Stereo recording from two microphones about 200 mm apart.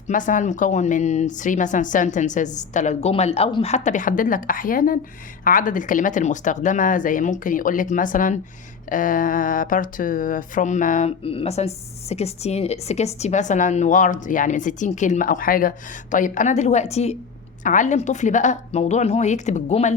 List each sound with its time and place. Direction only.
0.1 s speech: 40° left (ahead or behind)